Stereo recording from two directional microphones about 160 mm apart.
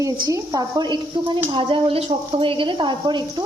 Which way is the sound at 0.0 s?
20° right (ahead or behind).